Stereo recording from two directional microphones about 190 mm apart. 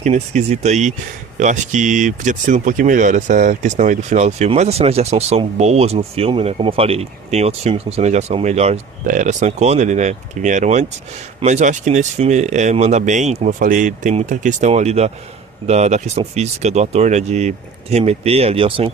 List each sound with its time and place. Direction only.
0.0 s speech: 35° right (ahead or behind)